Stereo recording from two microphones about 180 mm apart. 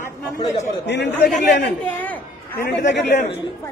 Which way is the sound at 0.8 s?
75° left (ahead or behind).